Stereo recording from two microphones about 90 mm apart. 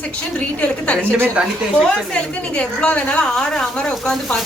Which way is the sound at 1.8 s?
10° left (ahead or behind).